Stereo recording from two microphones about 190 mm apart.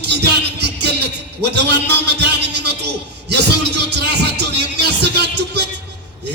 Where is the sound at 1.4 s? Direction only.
60° right (ahead or behind).